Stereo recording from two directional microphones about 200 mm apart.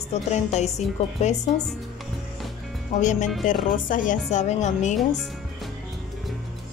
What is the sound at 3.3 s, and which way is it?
Speech, centre (ahead or behind).